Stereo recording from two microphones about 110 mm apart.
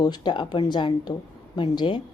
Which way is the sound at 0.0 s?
40° left (ahead or behind).